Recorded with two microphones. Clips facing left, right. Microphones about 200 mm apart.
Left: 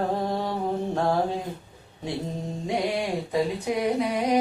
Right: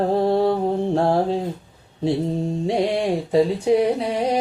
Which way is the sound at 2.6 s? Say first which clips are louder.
Right 5 dB; 30° right (ahead or behind).